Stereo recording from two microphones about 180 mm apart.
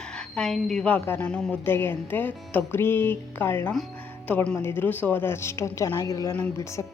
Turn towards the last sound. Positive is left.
turn(degrees=15)  # may be behind; listen again after turning